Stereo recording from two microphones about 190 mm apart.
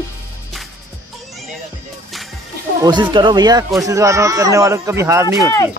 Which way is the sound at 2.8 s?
25° right (ahead or behind).